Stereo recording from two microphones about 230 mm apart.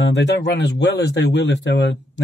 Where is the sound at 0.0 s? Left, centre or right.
Left.